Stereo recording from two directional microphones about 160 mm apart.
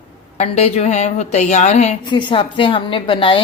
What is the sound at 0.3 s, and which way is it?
A woman's voice, 40° left (ahead or behind).